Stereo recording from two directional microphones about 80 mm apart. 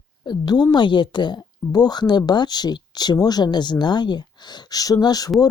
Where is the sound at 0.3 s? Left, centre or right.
Left.